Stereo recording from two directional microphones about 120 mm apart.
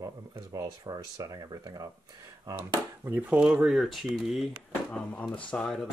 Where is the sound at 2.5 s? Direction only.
20° right (ahead or behind).